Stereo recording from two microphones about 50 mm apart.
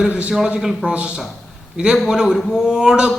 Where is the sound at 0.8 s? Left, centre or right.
Right.